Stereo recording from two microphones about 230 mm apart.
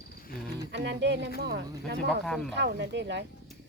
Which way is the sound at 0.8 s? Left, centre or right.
Right.